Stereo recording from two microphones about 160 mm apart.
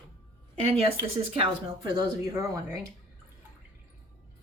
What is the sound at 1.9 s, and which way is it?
Speech, 20° right (ahead or behind).